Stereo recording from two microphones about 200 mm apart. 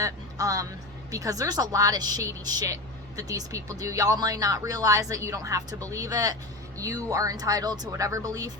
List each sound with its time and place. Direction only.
0.0 s a woman's voice: 15° right (ahead or behind)